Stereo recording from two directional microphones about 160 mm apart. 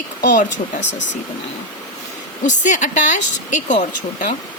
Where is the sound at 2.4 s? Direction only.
50° left (ahead or behind).